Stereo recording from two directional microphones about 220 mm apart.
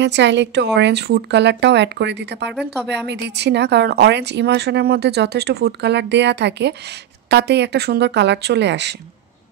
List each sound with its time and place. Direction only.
0.0 s a woman's voice: 50° right (ahead or behind)